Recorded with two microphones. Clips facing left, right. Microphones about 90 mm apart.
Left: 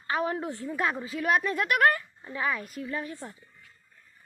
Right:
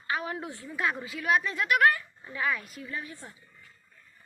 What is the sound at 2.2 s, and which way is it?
A woman's voice, 30° left (ahead or behind).